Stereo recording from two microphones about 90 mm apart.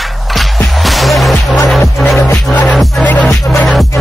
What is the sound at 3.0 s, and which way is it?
Music, 15° left (ahead or behind).